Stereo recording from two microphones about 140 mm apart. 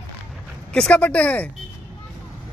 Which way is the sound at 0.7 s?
5° left (ahead or behind).